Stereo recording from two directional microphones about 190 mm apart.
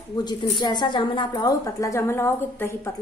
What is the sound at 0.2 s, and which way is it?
A woman's voice, 20° left (ahead or behind).